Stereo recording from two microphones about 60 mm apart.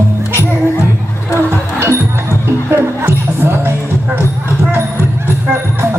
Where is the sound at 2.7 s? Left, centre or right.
Right.